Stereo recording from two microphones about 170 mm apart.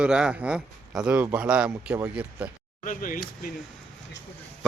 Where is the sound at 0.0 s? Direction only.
5° right (ahead or behind).